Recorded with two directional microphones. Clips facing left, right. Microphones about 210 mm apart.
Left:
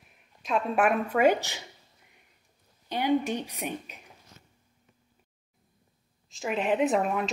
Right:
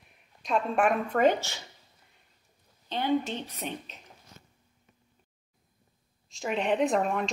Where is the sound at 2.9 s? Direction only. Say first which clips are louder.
Left 2 dB; 15° left (ahead or behind).